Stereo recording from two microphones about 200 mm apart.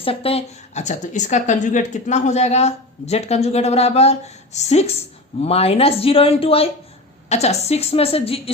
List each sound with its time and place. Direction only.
0.0 s speech: 30° left (ahead or behind)